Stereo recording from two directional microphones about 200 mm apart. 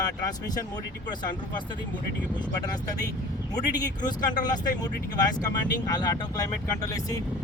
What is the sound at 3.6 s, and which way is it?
Speech, 20° left (ahead or behind).